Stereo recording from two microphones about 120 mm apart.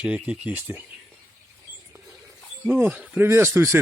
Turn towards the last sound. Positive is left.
turn(degrees=-20)  # may be behind; listen again after turning